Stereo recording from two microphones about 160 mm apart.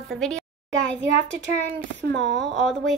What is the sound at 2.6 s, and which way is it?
Speech, centre (ahead or behind).